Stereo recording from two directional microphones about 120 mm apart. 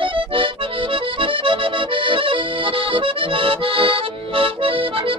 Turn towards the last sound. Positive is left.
turn(degrees=-45)  # may be behind; listen again after turning